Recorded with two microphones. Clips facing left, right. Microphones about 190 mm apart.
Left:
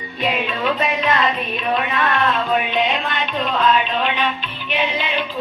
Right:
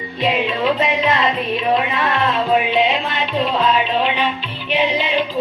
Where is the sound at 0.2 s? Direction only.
25° right (ahead or behind).